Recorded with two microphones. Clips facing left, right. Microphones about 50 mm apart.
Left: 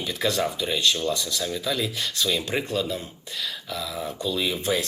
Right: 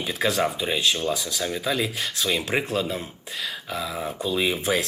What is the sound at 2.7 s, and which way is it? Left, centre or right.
Speech, right.